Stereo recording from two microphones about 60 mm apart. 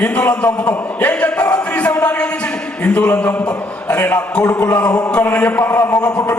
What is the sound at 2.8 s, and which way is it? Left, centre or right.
Speech, left.